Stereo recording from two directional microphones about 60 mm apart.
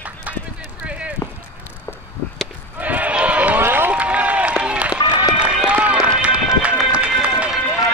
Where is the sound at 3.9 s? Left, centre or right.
Right.